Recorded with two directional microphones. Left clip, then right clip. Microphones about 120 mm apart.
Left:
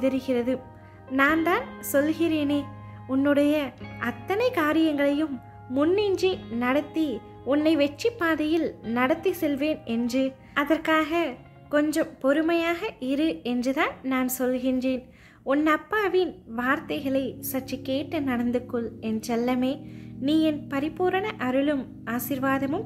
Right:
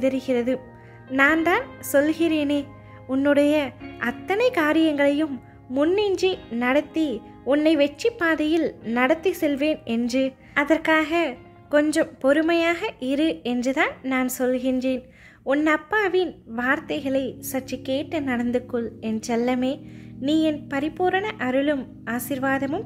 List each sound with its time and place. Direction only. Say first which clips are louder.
0.0 s speech: right 3 dB; 25° right (ahead or behind)